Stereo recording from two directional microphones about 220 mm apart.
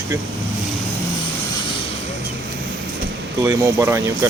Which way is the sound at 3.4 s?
10° right (ahead or behind).